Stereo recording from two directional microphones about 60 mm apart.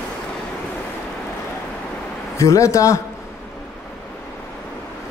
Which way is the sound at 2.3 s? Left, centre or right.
Left.